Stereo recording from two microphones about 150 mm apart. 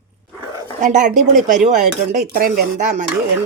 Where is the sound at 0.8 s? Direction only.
60° right (ahead or behind).